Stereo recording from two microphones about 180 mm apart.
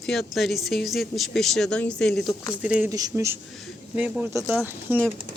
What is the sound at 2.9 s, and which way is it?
Speech, 15° right (ahead or behind).